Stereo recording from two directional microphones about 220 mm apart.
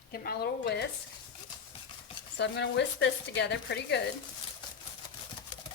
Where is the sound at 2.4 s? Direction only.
50° left (ahead or behind).